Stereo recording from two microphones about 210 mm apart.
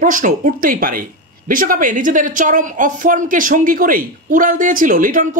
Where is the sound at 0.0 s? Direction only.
40° right (ahead or behind).